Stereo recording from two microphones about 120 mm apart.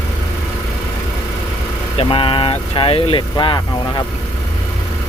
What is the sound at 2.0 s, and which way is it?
Speech, 45° left (ahead or behind).